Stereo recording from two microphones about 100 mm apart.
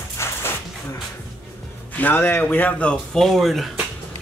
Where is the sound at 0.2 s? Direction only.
25° left (ahead or behind).